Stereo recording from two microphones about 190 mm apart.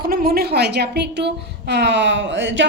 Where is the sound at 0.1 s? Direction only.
50° right (ahead or behind).